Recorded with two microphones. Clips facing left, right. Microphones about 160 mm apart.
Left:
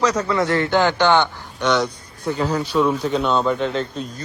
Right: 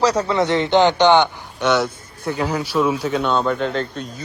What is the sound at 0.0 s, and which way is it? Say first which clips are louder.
Speech: right 2 dB; 35° right (ahead or behind).